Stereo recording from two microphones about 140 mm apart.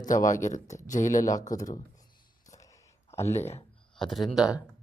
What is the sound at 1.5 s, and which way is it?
Speech, 70° left (ahead or behind).